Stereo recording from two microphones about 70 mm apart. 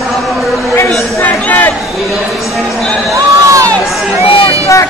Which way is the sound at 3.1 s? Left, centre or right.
Right.